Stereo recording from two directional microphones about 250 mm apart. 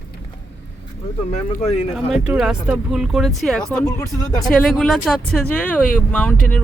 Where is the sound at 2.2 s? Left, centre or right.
Centre.